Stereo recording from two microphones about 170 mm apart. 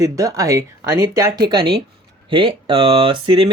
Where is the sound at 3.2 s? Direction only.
30° right (ahead or behind).